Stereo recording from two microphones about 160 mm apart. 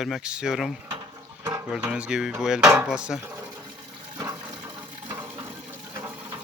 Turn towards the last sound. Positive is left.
turn(degrees=-10)  # may be behind; listen again after turning